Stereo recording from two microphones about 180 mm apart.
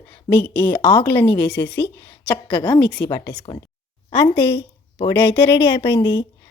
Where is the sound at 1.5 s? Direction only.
70° left (ahead or behind).